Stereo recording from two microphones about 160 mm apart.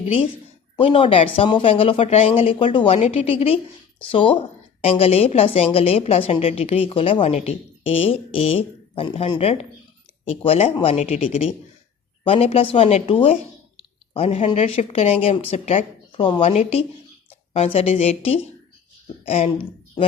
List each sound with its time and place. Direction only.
0.0 s a woman's voice: 35° left (ahead or behind)